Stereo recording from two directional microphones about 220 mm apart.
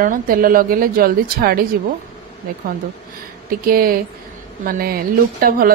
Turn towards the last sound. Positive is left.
turn(degrees=-40)  # may be behind; listen again after turning